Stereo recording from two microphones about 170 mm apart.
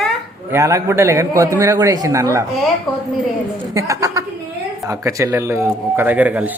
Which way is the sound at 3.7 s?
20° right (ahead or behind).